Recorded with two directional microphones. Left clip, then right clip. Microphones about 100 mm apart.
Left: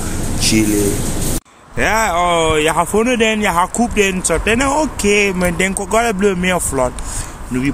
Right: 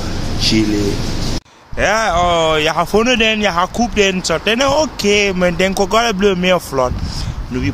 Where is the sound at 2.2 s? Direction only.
40° right (ahead or behind).